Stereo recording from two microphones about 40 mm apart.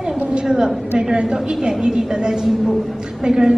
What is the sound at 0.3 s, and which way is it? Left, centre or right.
A woman's voice, centre.